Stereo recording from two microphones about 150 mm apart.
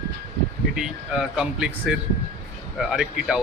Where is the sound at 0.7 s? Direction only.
5° right (ahead or behind).